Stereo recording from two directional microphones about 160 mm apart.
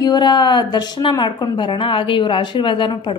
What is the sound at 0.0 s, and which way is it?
A woman's voice, 30° left (ahead or behind).